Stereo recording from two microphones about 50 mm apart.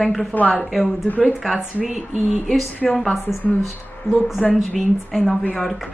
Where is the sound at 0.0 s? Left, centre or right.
Centre.